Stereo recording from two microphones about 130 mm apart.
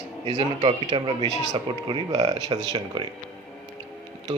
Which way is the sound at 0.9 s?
40° right (ahead or behind).